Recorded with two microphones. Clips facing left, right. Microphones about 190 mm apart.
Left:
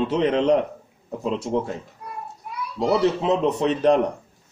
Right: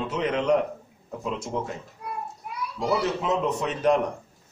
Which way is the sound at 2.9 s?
30° left (ahead or behind).